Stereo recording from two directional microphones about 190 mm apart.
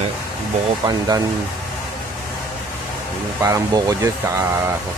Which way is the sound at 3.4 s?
15° right (ahead or behind).